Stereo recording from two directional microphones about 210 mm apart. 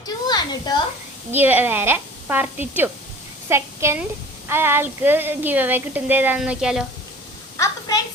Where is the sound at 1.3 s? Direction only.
10° right (ahead or behind).